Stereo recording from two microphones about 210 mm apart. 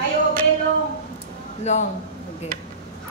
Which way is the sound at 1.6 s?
35° left (ahead or behind).